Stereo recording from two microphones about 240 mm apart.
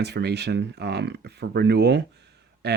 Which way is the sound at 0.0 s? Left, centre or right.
Right.